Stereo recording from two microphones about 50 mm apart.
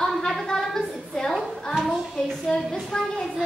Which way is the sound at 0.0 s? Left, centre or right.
Centre.